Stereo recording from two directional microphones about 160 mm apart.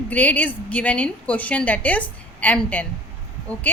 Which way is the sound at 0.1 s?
10° left (ahead or behind).